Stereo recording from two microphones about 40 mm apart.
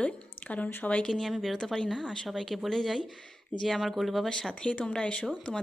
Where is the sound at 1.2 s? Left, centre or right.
Centre.